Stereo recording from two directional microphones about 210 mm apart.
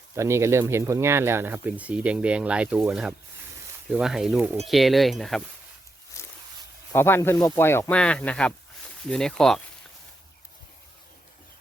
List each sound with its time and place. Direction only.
0.2 s speech: 15° right (ahead or behind)
6.2 s a sound: 15° left (ahead or behind)
6.9 s speech: 10° left (ahead or behind)